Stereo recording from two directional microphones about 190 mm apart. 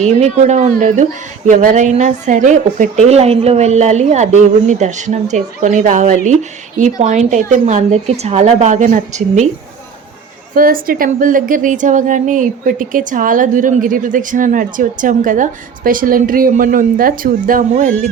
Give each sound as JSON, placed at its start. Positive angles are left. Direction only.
{"t": 0.0, "sound": "a woman's voice", "side_deg": -35}
{"t": 10.5, "sound": "a woman's voice", "side_deg": -50}